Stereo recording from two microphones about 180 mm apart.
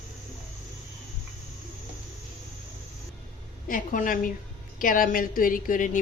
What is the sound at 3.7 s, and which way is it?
A woman's voice, 50° left (ahead or behind).